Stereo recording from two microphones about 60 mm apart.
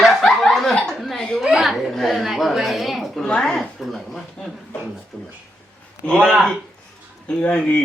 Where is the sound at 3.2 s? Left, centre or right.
Centre.